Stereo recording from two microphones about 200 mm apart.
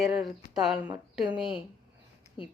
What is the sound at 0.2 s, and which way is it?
Speech, centre (ahead or behind).